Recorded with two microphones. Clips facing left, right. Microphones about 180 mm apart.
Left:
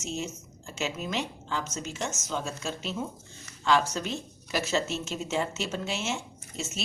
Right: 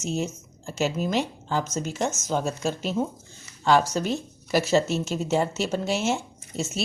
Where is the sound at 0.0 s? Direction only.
45° right (ahead or behind).